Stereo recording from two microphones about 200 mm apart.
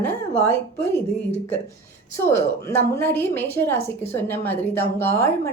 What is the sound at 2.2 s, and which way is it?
Speech, 10° left (ahead or behind).